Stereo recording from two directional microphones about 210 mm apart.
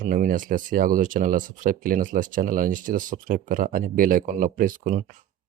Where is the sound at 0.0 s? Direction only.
40° right (ahead or behind).